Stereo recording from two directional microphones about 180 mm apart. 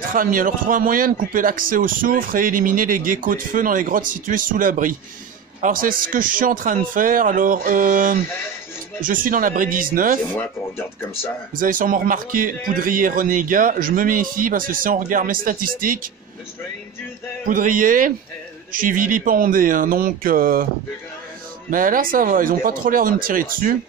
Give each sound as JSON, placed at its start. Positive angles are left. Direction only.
{"t": 0.1, "sound": "speech", "side_deg": -50}
{"t": 11.5, "sound": "speech", "side_deg": -50}
{"t": 17.5, "sound": "speech", "side_deg": -50}
{"t": 21.6, "sound": "speech", "side_deg": -50}